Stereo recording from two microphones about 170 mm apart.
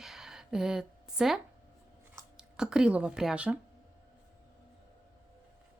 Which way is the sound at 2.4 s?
5° right (ahead or behind).